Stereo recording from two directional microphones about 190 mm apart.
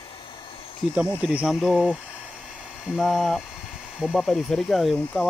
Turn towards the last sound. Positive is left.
turn(degrees=0)  # may be behind; listen again after turning